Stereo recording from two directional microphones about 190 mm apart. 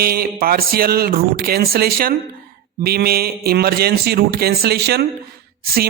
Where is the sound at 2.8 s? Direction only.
55° right (ahead or behind).